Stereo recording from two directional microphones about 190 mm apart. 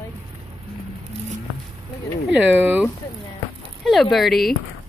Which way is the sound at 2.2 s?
10° right (ahead or behind).